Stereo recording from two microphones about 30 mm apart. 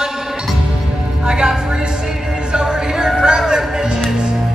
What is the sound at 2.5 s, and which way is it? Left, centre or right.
Music, right.